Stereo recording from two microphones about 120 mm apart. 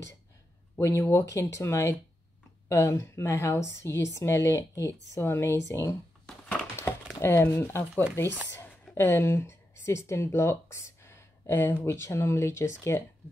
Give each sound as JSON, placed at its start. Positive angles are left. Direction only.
{"t": 0.7, "sound": "a woman's voice", "side_deg": 20}
{"t": 6.8, "sound": "a sound", "side_deg": 20}
{"t": 8.2, "sound": "a woman's voice", "side_deg": 20}